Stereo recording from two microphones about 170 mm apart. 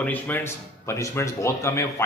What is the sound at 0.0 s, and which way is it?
A man's voice, 10° left (ahead or behind).